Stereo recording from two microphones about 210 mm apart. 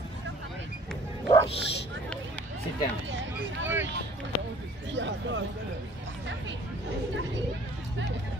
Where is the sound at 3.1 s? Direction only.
60° right (ahead or behind).